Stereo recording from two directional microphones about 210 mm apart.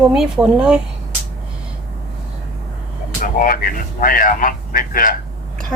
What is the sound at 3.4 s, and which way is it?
A man's voice, 40° left (ahead or behind).